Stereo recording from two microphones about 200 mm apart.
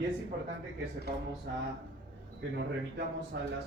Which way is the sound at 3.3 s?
60° right (ahead or behind).